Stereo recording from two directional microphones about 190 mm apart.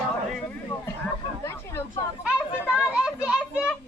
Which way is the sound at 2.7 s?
5° right (ahead or behind).